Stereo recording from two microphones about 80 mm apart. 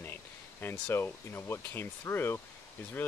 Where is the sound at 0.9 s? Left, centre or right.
Left.